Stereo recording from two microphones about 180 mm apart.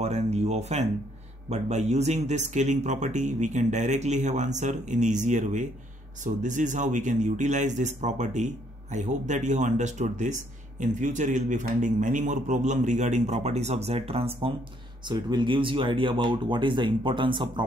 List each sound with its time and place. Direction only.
0.0 s a man's voice: 35° right (ahead or behind)